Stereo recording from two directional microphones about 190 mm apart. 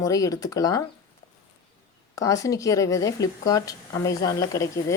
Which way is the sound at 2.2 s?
15° left (ahead or behind).